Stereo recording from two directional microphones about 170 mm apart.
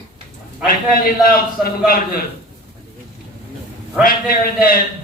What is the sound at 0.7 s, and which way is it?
A man's voice, 60° left (ahead or behind).